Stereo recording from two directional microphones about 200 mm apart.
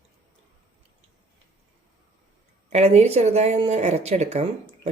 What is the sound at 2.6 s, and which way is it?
Speech, 35° right (ahead or behind).